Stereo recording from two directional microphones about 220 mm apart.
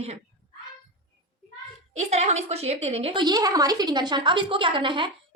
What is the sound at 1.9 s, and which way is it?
A woman's voice, 30° right (ahead or behind).